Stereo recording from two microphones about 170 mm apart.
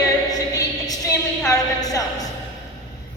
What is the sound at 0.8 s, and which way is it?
A woman's voice, 20° left (ahead or behind).